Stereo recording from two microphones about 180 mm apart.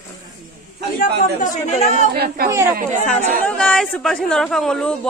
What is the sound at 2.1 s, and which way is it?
Speech, 60° right (ahead or behind).